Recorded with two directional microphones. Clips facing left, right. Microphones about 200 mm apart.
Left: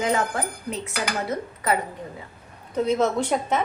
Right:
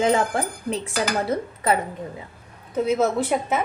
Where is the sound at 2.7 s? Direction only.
5° right (ahead or behind).